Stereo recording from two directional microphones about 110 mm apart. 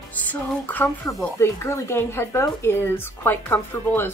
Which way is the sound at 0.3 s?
15° left (ahead or behind).